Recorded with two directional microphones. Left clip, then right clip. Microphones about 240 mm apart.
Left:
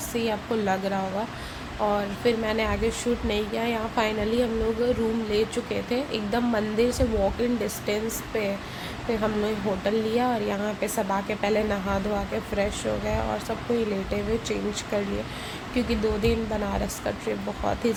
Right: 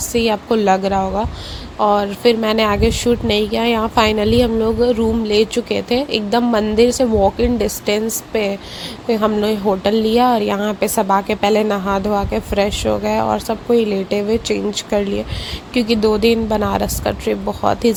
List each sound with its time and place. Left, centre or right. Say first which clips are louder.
0.1 s a woman's voice: right 11 dB; right